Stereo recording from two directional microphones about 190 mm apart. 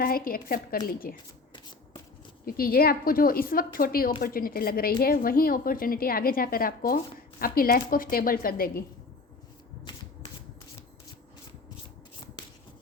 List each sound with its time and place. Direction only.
0.0 s a woman's voice: 50° left (ahead or behind)
2.4 s a woman's voice: 50° left (ahead or behind)